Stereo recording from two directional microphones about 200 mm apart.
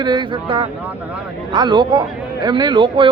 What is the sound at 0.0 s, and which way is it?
A man's voice, 20° right (ahead or behind).